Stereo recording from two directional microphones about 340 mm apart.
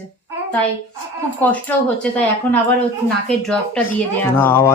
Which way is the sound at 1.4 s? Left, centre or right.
Centre.